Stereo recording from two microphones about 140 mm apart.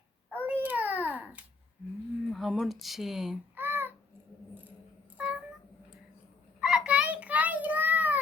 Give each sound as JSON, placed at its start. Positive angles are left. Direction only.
{"t": 0.3, "sound": "babbling", "side_deg": -10}
{"t": 2.3, "sound": "speech", "side_deg": 0}
{"t": 3.5, "sound": "babbling", "side_deg": -15}
{"t": 5.2, "sound": "cat", "side_deg": -10}
{"t": 6.6, "sound": "child singing", "side_deg": -5}